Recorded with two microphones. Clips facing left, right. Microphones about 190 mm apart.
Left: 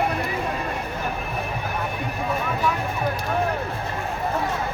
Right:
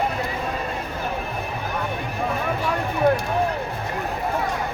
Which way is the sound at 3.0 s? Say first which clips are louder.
Right 10 dB; 65° right (ahead or behind).